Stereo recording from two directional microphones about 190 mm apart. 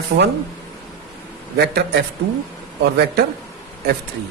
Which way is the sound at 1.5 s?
60° right (ahead or behind).